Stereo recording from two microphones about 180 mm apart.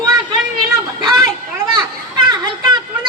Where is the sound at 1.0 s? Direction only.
20° right (ahead or behind).